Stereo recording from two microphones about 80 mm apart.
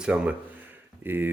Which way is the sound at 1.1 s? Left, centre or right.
Right.